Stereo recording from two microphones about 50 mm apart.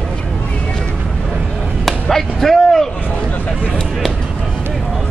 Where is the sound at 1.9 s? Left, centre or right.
Centre.